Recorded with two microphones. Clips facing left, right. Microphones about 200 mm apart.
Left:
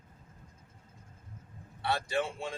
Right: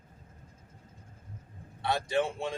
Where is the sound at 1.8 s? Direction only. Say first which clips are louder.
Right 3 dB; 20° right (ahead or behind).